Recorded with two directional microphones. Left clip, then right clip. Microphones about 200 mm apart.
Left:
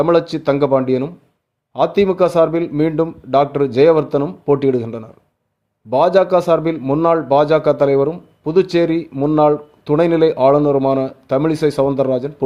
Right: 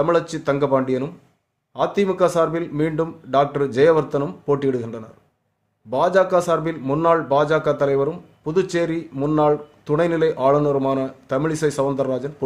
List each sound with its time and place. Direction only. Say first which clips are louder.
0.0 s a man's voice: left 5 dB; 25° left (ahead or behind)